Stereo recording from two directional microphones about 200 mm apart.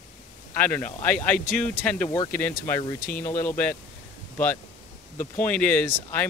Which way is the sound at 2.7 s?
15° left (ahead or behind).